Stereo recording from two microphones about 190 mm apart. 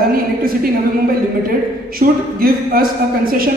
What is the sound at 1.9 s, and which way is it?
A man's voice, 50° right (ahead or behind).